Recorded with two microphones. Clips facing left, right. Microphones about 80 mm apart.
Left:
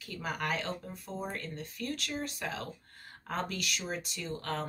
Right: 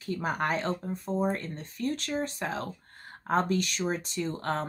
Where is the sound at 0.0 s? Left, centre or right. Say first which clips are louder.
Right 6 dB; right.